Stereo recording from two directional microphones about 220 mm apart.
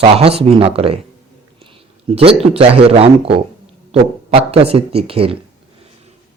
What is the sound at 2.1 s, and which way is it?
Speech, 25° right (ahead or behind).